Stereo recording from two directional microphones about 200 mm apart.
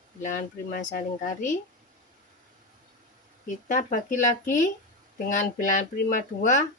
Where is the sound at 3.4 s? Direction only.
40° left (ahead or behind).